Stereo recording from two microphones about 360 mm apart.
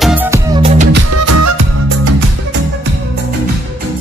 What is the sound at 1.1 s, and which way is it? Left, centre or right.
Music, right.